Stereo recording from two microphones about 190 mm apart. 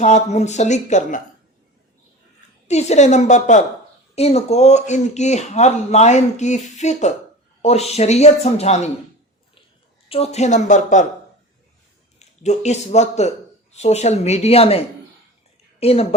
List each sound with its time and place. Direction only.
0.0 s speech: 35° left (ahead or behind)
2.6 s speech: 35° left (ahead or behind)
10.1 s speech: 35° left (ahead or behind)
12.2 s speech: 35° left (ahead or behind)